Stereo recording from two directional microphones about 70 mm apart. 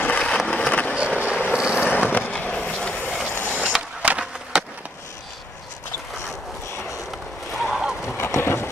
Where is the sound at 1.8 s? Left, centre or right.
Left.